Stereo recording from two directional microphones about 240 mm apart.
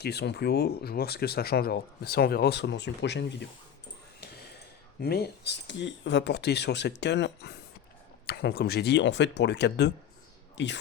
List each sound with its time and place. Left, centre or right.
0.0 s speech: left
4.9 s speech: left